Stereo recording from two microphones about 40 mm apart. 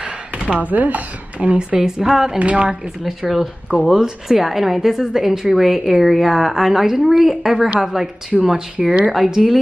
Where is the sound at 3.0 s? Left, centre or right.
Centre.